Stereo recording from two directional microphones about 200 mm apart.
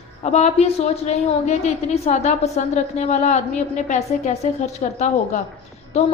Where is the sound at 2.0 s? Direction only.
35° left (ahead or behind).